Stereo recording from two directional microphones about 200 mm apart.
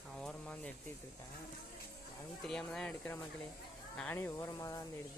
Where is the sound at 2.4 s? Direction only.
5° left (ahead or behind).